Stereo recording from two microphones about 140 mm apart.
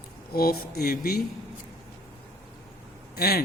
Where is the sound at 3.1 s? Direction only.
90° left.